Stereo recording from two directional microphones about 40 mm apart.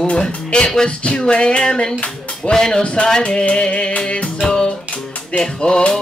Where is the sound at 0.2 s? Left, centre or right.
Centre.